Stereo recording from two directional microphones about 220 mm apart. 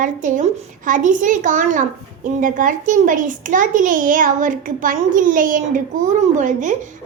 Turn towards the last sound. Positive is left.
turn(degrees=-35)  # may be behind; listen again after turning